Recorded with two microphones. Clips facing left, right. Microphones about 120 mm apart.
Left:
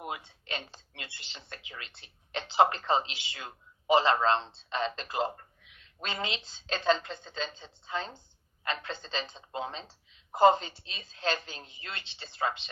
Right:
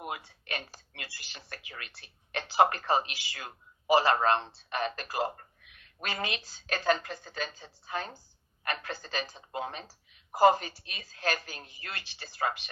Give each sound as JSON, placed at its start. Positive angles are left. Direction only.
{"t": 0.0, "sound": "a woman's voice", "side_deg": 25}